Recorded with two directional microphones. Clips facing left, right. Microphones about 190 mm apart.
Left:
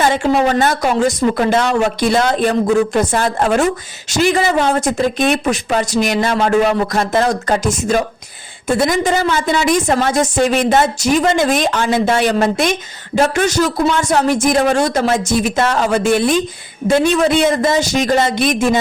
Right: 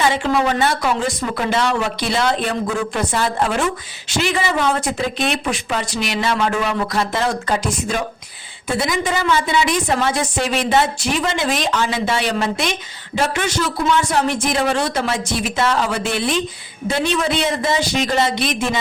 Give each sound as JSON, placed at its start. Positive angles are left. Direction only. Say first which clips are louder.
{"t": 0.0, "sound": "speech", "louder": "left 4 dB", "side_deg": 45}